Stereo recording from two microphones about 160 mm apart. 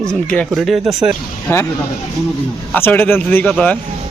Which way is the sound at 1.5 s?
15° left (ahead or behind).